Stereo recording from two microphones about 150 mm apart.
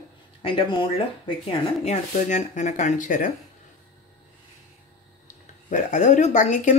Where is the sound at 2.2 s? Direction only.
55° left (ahead or behind).